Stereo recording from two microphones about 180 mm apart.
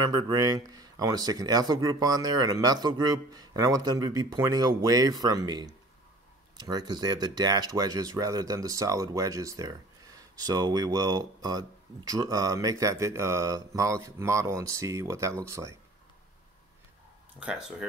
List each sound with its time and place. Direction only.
0.0 s speech: 20° right (ahead or behind)
17.4 s speech: 5° right (ahead or behind)